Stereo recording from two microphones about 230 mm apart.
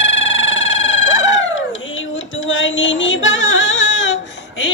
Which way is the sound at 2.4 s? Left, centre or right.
Left.